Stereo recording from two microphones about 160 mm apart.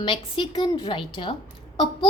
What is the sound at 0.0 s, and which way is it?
A woman's voice, 30° left (ahead or behind).